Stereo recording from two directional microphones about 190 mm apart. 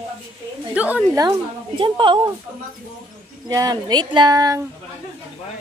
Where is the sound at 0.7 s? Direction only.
10° right (ahead or behind).